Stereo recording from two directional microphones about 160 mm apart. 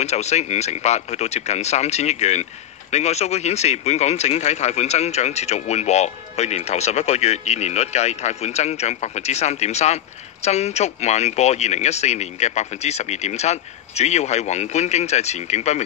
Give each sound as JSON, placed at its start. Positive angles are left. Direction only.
{"t": 0.0, "sound": "speech", "side_deg": 45}